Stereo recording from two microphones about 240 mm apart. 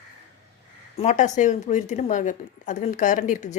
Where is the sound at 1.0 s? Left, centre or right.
Left.